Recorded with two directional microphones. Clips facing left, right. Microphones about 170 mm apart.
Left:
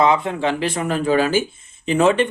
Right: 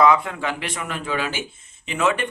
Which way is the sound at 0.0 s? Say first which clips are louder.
Left 1 dB; 25° left (ahead or behind).